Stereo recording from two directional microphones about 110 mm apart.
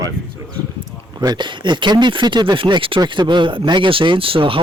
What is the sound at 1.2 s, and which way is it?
Speech, 40° right (ahead or behind).